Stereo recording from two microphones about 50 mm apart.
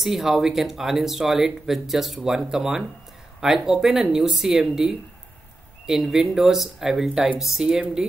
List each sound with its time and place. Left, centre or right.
0.0 s speech: centre